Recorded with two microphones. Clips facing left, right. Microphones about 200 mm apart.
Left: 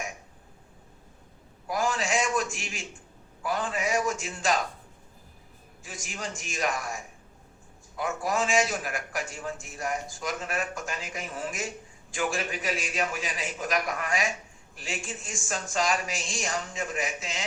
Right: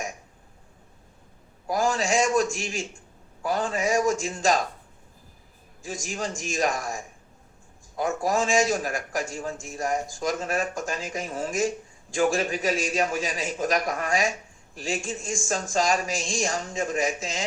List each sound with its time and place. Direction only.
1.6 s a sound: 40° right (ahead or behind)
3.4 s a man's voice: 40° right (ahead or behind)
5.8 s a man's voice: 45° right (ahead or behind)